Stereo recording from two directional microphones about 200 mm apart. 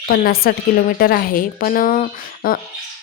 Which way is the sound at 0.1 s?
50° left (ahead or behind).